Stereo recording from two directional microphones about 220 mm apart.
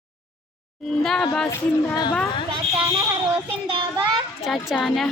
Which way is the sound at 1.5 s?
15° left (ahead or behind).